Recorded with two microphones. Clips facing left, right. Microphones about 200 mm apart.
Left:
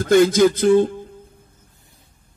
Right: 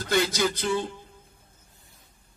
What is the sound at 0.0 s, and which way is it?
Speech, 50° left (ahead or behind).